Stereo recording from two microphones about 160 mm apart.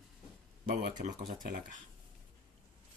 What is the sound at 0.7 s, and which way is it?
Speech, 55° right (ahead or behind).